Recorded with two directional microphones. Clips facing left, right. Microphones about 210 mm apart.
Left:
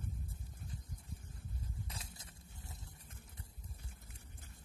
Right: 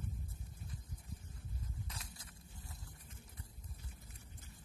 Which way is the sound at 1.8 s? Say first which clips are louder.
Left 1 dB; 25° left (ahead or behind).